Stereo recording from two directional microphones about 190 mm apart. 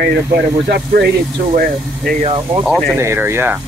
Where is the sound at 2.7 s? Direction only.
Centre (ahead or behind).